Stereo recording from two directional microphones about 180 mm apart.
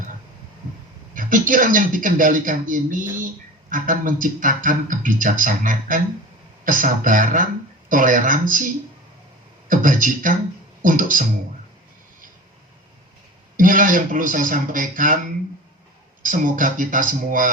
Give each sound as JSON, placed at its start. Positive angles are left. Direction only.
{"t": 1.1, "sound": "speech", "side_deg": -50}
{"t": 9.6, "sound": "speech", "side_deg": -50}
{"t": 13.6, "sound": "speech", "side_deg": -50}
{"t": 16.2, "sound": "speech", "side_deg": -50}